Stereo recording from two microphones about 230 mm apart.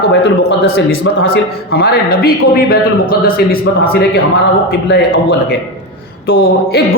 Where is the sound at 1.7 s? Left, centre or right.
Left.